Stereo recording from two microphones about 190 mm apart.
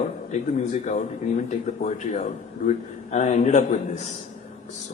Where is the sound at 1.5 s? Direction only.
40° left (ahead or behind).